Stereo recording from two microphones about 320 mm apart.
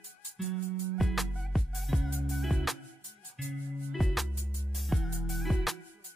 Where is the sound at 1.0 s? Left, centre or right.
Centre.